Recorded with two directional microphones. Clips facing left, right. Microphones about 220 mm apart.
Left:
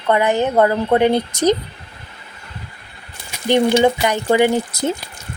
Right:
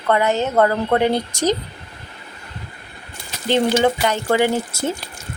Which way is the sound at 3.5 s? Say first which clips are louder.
Left 3 dB; 15° left (ahead or behind).